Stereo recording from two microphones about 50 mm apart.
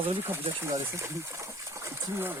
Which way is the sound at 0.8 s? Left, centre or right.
Right.